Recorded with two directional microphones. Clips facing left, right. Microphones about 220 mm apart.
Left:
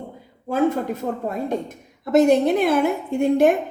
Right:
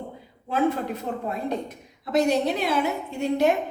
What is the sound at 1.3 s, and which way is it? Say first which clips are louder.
A woman's voice: left 3 dB; 45° left (ahead or behind).